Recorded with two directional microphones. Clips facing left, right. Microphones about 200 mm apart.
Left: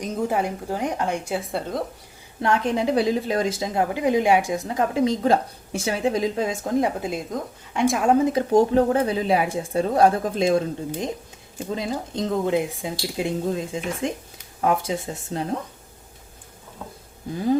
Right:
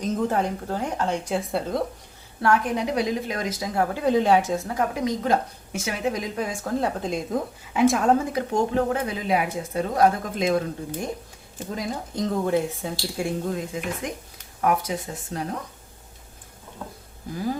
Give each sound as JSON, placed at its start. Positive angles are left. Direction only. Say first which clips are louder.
{"t": 0.0, "sound": "speech", "louder": "even", "side_deg": 10}
{"t": 2.4, "sound": "a woman's voice", "louder": "left 1 dB", "side_deg": 25}
{"t": 8.2, "sound": "a woman's voice", "louder": "left 6 dB", "side_deg": 25}